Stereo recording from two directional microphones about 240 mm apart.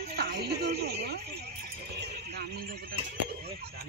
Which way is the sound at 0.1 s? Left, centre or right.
Right.